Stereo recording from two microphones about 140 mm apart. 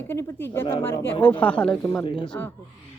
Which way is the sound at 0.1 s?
15° left (ahead or behind).